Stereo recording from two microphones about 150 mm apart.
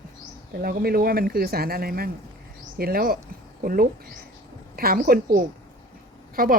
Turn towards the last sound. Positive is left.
turn(degrees=-75)  # may be behind; listen again after turning